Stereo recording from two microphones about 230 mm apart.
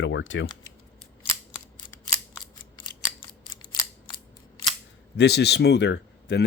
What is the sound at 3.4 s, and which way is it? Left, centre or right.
Scissors, left.